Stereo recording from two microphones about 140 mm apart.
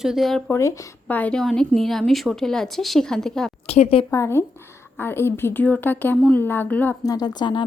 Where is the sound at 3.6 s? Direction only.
50° left (ahead or behind).